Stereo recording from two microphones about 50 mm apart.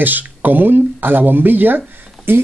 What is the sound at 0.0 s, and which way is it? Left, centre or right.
Speech, right.